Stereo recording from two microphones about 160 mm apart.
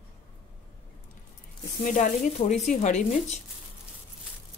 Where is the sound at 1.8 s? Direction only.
55° left (ahead or behind).